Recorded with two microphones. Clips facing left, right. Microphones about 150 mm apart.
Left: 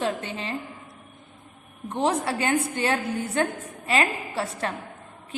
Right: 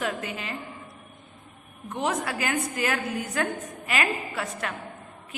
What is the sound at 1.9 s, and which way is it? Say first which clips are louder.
A woman's voice: left 4 dB; 30° left (ahead or behind).